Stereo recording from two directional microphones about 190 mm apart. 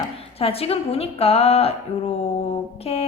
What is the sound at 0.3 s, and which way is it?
A woman's voice, 30° left (ahead or behind).